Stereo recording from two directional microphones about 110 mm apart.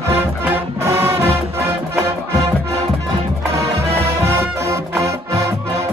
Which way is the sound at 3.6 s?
25° right (ahead or behind).